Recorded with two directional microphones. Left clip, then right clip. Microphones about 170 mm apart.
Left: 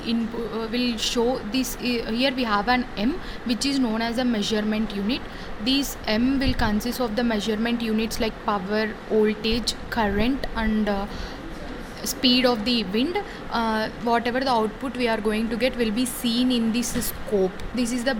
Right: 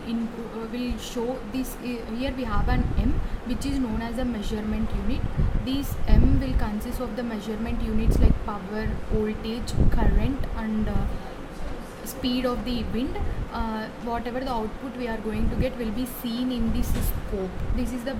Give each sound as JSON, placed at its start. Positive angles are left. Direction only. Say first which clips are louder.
{"t": 0.7, "sound": "a woman's voice", "louder": "left 7 dB", "side_deg": 45}
{"t": 12.2, "sound": "a woman's voice", "louder": "left 7 dB", "side_deg": 45}